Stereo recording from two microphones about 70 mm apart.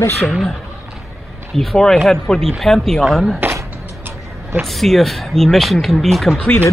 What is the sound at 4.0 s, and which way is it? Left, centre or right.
Vehicle, right.